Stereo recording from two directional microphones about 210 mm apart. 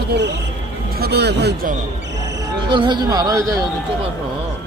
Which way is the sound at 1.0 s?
50° right (ahead or behind).